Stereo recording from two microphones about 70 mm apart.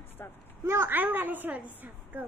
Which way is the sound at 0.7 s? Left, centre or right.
Right.